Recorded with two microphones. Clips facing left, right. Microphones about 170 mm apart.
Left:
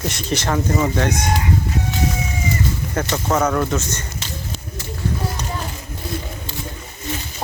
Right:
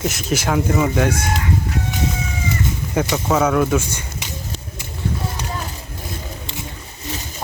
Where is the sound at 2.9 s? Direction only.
10° right (ahead or behind).